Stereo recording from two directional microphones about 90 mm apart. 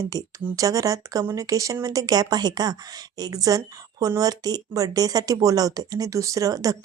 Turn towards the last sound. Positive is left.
turn(degrees=-45)  # may be behind; listen again after turning